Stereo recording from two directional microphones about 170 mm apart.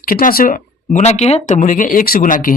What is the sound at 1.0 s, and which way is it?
Speech, 40° left (ahead or behind).